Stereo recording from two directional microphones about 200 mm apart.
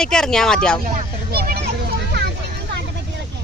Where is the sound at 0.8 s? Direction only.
45° right (ahead or behind).